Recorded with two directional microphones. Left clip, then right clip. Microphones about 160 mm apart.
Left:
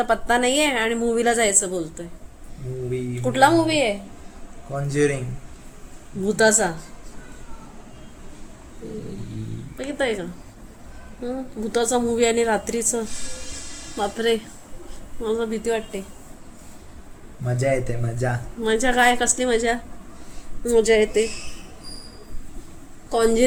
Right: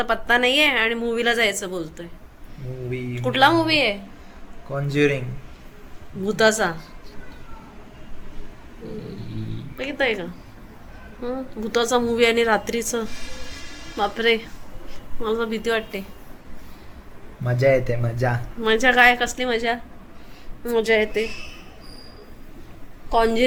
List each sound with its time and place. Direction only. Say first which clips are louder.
0.0 s a woman's voice: even; 35° left (ahead or behind)
3.2 s a woman's voice: even; 30° left (ahead or behind)
4.7 s a man's voice: right 1 dB; 15° right (ahead or behind)
6.2 s a woman's voice: even; 25° left (ahead or behind)
9.7 s a woman's voice: right 2 dB; 35° left (ahead or behind)
14.0 s a woman's voice: right 2 dB; 35° left (ahead or behind)
17.4 s speech: right 4 dB; 20° right (ahead or behind)
18.6 s a woman's voice: right 3 dB; 30° left (ahead or behind)
23.1 s a woman's voice: even; 35° left (ahead or behind)